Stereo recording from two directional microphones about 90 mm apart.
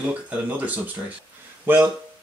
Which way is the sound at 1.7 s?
20° right (ahead or behind).